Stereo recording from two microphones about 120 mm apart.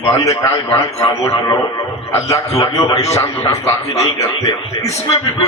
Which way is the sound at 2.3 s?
25° left (ahead or behind).